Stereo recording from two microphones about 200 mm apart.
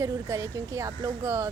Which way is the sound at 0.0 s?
15° right (ahead or behind).